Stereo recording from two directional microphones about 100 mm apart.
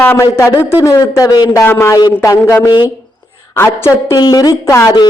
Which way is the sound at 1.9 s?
40° left (ahead or behind).